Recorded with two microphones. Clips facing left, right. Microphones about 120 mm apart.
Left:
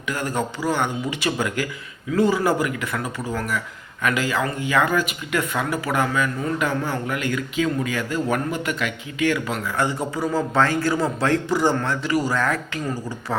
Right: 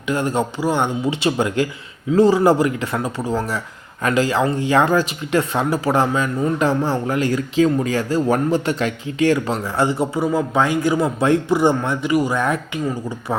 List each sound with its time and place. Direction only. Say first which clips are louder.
0.1 s speech: right 5 dB; 25° right (ahead or behind)
10.2 s speech: even; 15° right (ahead or behind)